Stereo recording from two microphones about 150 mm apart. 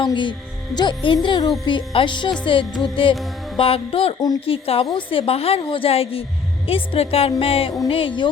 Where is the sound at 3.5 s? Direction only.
35° left (ahead or behind).